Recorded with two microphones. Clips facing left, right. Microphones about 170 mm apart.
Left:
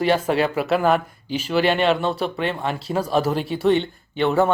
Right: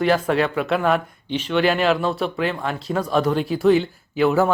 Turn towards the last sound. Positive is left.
turn(degrees=0)  # may be behind; listen again after turning